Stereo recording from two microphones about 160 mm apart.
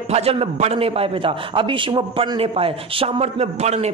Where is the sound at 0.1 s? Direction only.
40° right (ahead or behind).